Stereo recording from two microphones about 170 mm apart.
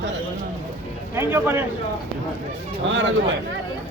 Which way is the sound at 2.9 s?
90° right.